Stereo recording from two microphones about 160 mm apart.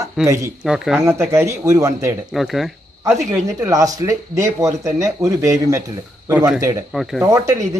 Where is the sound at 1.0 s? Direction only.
15° right (ahead or behind).